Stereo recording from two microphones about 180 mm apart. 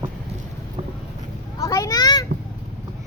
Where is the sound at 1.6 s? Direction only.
20° left (ahead or behind).